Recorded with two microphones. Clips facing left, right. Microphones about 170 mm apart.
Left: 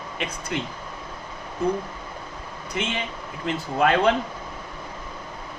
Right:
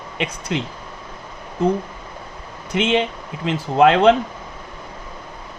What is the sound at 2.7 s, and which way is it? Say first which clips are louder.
Speech: right 10 dB; 75° right (ahead or behind).